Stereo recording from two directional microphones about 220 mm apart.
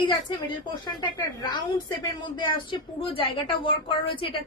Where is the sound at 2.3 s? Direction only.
20° left (ahead or behind).